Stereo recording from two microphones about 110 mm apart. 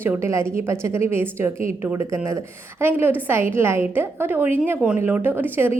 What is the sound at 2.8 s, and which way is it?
A woman's voice, 20° right (ahead or behind).